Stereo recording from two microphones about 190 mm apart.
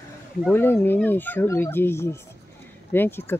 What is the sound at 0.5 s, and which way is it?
Speech, 10° left (ahead or behind).